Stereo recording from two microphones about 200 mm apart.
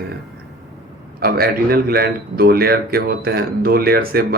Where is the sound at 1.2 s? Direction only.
50° right (ahead or behind).